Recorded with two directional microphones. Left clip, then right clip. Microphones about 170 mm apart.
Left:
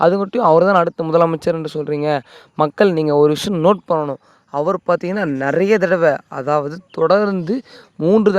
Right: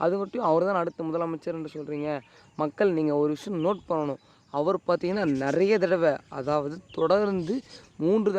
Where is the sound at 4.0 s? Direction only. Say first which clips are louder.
Left 8 dB; 40° left (ahead or behind).